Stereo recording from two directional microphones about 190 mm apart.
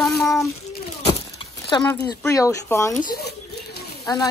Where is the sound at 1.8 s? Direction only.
10° left (ahead or behind).